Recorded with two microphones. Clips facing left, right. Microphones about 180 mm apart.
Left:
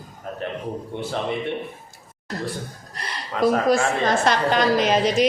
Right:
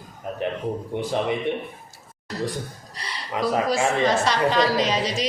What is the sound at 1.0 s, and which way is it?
Speech, 15° right (ahead or behind).